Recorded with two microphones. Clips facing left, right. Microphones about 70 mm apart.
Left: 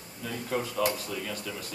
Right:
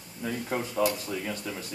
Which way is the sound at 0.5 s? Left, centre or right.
Right.